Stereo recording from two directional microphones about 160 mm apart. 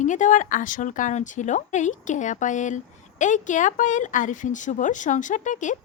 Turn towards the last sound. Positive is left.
turn(degrees=50)  # may be behind; listen again after turning